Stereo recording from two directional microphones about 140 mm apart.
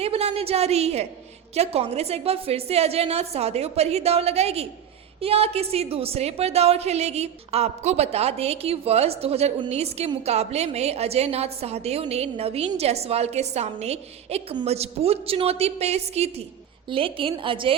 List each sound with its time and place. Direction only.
0.0 s a woman's voice: 45° right (ahead or behind)
16.9 s a woman's voice: 40° right (ahead or behind)